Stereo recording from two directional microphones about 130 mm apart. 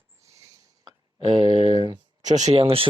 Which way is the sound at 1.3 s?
40° right (ahead or behind).